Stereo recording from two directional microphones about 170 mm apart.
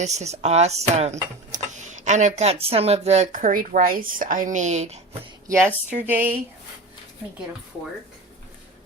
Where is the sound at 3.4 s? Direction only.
55° right (ahead or behind).